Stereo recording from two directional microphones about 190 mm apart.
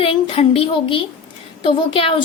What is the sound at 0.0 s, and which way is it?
A woman's voice, 30° left (ahead or behind).